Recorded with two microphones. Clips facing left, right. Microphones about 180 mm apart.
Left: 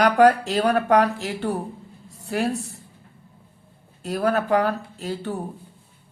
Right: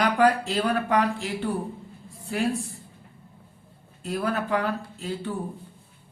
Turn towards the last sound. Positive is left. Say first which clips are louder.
# left 2 dB
turn(degrees=40)  # may be behind; listen again after turning